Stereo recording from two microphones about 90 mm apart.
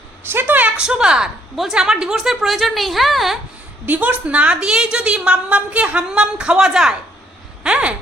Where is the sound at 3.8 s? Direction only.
20° right (ahead or behind).